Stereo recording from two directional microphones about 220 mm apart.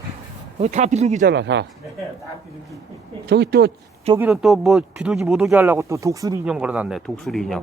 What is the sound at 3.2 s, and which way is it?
Speech, 50° right (ahead or behind).